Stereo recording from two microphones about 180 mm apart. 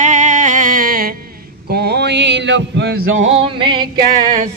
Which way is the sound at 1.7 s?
65° right (ahead or behind).